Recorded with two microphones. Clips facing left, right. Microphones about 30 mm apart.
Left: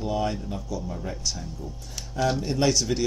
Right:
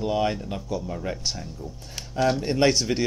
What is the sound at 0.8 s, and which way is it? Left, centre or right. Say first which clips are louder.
Speech: right 2 dB; right.